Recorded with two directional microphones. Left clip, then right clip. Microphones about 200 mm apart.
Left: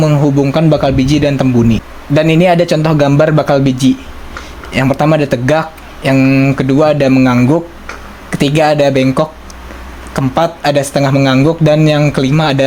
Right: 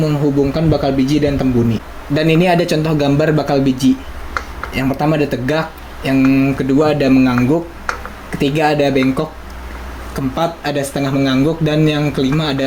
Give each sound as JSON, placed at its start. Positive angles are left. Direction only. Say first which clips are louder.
{"t": 0.0, "sound": "speech", "louder": "left 4 dB", "side_deg": 45}